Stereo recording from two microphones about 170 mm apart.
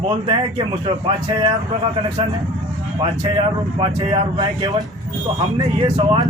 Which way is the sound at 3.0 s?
35° right (ahead or behind).